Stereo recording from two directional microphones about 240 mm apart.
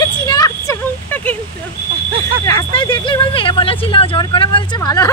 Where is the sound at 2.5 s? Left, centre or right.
Centre.